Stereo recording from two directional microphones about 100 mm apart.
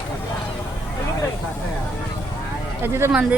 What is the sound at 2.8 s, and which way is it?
Speech, 25° right (ahead or behind).